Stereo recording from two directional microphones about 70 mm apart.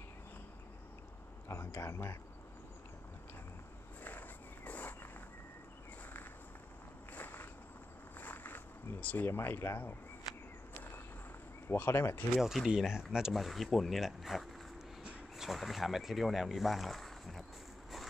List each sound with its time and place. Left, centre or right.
1.8 s speech: left
4.6 s a sound: left
7.2 s walk: left
8.2 s a sound: left
11.6 s speech: left
12.4 s speech: centre